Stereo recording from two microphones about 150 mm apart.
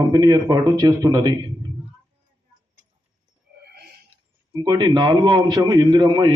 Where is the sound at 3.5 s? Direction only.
90° right.